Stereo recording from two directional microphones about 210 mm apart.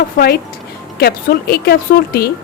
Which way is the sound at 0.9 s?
45° left (ahead or behind).